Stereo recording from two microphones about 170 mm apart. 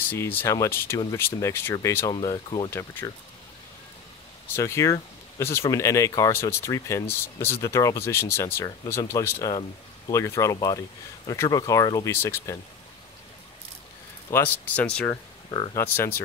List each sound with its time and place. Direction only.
0.0 s speech: 10° left (ahead or behind)
2.2 s speech: 30° left (ahead or behind)
2.7 s speech: 15° left (ahead or behind)
4.6 s speech: 15° left (ahead or behind)
14.3 s speech: 10° left (ahead or behind)
15.5 s speech: 20° left (ahead or behind)